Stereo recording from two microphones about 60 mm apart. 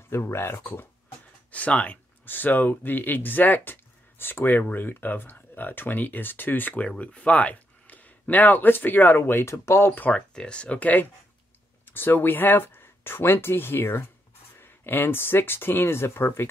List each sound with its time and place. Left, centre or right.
0.1 s speech: left
1.5 s speech: left
2.2 s speech: left
9.5 s speech: left
9.9 s speech: left
10.3 s speech: centre; by 16.4 s left